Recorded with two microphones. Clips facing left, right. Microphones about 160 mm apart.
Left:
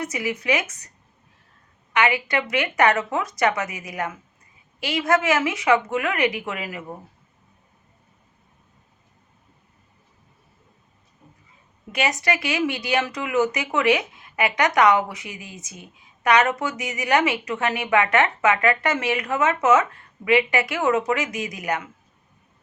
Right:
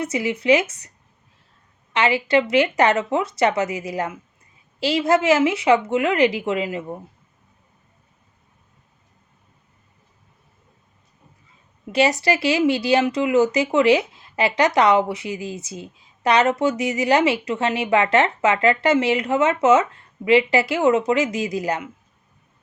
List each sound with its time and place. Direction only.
0.0 s speech: 25° right (ahead or behind)
1.9 s speech: 30° right (ahead or behind)
11.9 s speech: 30° right (ahead or behind)